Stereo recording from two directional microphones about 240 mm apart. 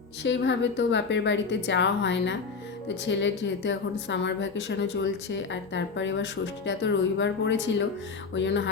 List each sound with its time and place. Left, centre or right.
0.2 s speech: left